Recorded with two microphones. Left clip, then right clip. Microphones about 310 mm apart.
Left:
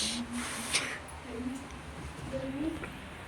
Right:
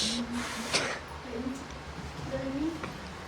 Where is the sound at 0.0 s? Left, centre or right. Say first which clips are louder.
Right 3 dB; centre.